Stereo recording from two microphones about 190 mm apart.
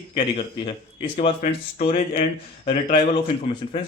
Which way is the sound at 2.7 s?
35° left (ahead or behind).